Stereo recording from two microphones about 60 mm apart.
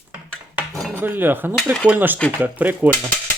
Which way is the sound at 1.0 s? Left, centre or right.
Right.